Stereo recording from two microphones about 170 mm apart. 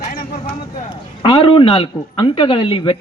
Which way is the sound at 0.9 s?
30° left (ahead or behind).